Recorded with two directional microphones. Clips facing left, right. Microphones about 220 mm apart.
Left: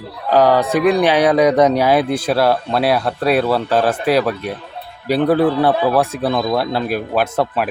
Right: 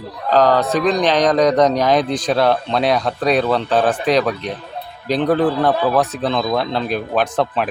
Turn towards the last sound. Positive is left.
turn(degrees=5)  # may be behind; listen again after turning